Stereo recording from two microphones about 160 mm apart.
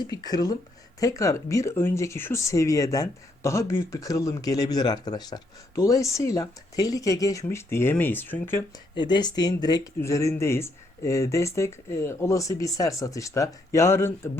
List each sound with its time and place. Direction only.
0.0 s speech: 25° left (ahead or behind)
9.0 s speech: 30° left (ahead or behind)